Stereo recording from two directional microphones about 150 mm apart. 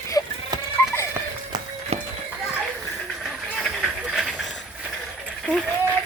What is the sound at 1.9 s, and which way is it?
Horse, 45° right (ahead or behind).